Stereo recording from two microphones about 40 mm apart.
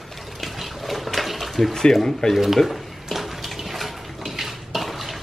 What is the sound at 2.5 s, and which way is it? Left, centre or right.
Drawer open or close, centre.